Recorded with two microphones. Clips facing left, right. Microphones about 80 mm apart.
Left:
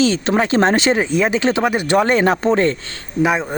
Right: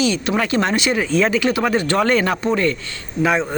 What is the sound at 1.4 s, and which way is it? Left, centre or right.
Speech, left.